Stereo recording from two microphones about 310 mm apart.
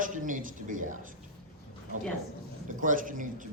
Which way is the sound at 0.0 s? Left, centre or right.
Right.